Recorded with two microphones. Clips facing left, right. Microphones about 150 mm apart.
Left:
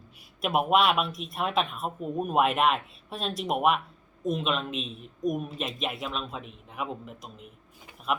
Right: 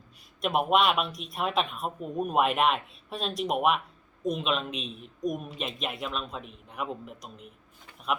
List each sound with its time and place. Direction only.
0.4 s speech: centre (ahead or behind)